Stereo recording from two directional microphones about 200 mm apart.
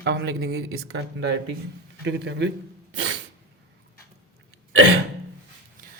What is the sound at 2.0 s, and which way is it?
Speech, 60° right (ahead or behind).